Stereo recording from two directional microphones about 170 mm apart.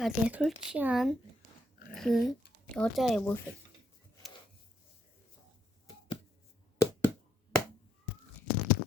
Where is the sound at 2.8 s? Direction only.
5° left (ahead or behind).